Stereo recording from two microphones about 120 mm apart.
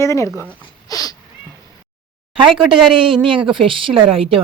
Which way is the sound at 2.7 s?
45° right (ahead or behind).